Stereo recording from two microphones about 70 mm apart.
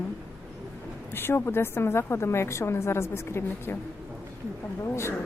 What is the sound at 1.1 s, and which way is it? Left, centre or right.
A woman's voice, left.